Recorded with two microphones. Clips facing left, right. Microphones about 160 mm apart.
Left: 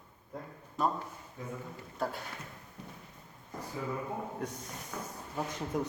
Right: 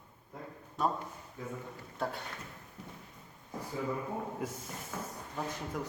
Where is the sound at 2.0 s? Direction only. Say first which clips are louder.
Left 1 dB; centre (ahead or behind).